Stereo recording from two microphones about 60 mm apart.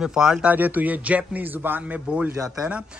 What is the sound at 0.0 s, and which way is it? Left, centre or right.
Speech, centre.